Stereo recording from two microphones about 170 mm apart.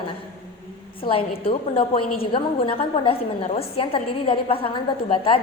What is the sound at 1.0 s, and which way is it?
A woman's voice, 35° left (ahead or behind).